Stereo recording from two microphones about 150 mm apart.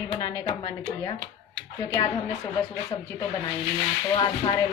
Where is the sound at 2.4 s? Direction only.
20° left (ahead or behind).